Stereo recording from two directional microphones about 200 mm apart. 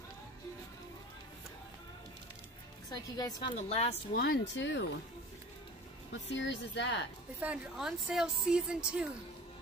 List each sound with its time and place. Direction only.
2.9 s a woman's voice: 20° left (ahead or behind)
3.5 s a woman's voice: 30° left (ahead or behind)
4.2 s speech: 55° left (ahead or behind)
6.3 s speech: 60° left (ahead or behind)
7.3 s a woman's voice: 5° right (ahead or behind)